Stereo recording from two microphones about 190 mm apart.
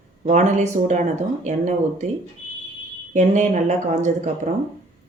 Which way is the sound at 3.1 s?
40° right (ahead or behind).